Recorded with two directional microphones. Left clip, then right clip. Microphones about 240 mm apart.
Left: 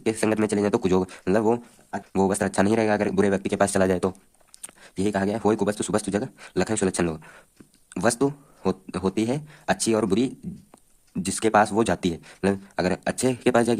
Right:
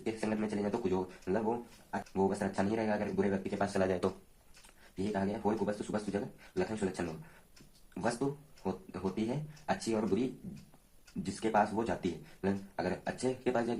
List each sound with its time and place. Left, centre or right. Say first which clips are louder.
0.0 s speech: left 13 dB; left
11.3 s speech: left 11 dB; left